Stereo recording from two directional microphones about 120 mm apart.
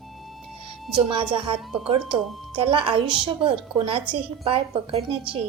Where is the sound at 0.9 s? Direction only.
50° right (ahead or behind).